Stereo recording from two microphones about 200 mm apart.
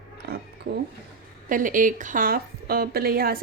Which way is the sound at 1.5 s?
40° right (ahead or behind).